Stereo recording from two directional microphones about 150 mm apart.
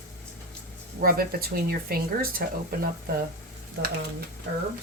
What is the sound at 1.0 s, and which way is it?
Speech, 85° right.